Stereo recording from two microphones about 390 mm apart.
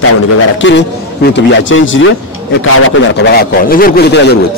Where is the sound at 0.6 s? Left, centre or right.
Left.